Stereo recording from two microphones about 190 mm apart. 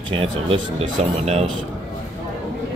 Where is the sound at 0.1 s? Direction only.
30° right (ahead or behind).